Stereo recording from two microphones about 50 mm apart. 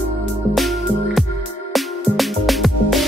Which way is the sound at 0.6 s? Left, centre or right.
Centre.